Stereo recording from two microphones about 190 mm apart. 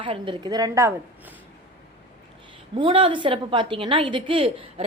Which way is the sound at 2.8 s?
25° right (ahead or behind).